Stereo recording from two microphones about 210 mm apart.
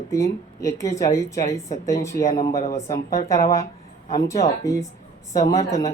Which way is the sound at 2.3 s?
35° left (ahead or behind).